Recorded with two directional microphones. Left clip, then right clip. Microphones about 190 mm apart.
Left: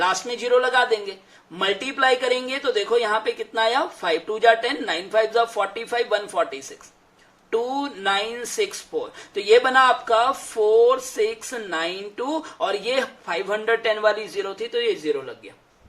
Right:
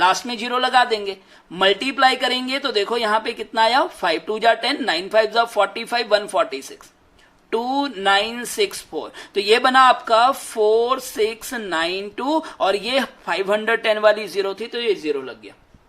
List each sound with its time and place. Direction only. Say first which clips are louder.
0.0 s speech: right 4 dB; 35° right (ahead or behind)